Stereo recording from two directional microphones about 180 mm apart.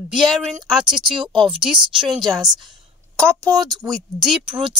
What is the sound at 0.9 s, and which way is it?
A woman's voice, 25° right (ahead or behind).